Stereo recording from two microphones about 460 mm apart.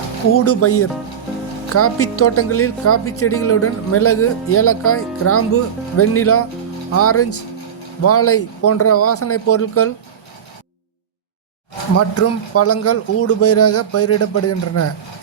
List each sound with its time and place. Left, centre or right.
0.4 s speech: left
11.9 s speech: left